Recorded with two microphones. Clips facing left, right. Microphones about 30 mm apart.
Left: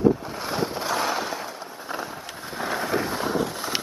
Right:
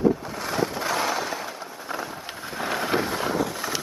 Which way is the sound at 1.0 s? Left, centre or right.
Centre.